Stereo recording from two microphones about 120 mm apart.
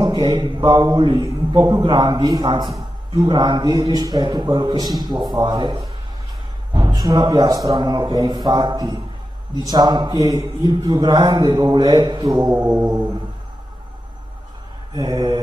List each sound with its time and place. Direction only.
0.0 s a man's voice: 40° right (ahead or behind)
12.5 s a sound: 15° right (ahead or behind)
15.0 s a man's voice: 35° right (ahead or behind)